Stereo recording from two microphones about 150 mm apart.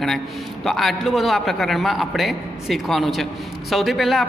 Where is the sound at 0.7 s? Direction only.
Centre (ahead or behind).